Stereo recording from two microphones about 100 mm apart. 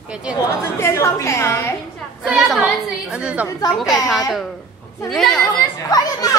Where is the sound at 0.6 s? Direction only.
25° left (ahead or behind).